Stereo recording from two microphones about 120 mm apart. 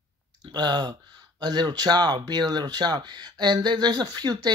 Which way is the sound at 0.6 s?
35° right (ahead or behind).